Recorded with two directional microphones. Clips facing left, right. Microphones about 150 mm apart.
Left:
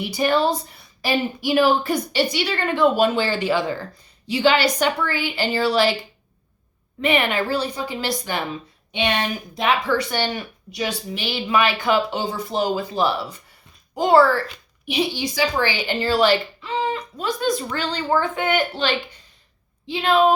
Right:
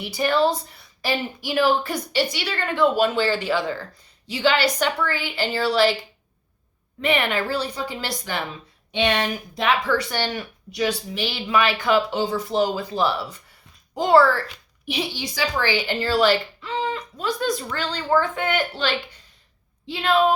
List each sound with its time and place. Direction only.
0.0 s a woman's voice: 15° left (ahead or behind)
7.0 s a woman's voice: 15° left (ahead or behind)